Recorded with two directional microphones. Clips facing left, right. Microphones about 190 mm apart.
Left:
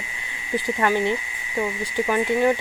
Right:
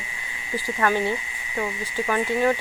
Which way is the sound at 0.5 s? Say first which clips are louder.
Left 2 dB; 20° left (ahead or behind).